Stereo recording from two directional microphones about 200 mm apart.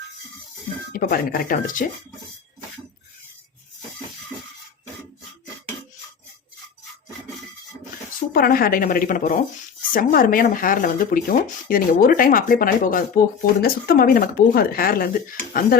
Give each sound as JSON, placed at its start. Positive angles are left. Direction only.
{"t": 0.9, "sound": "speech", "side_deg": 45}
{"t": 8.3, "sound": "speech", "side_deg": 45}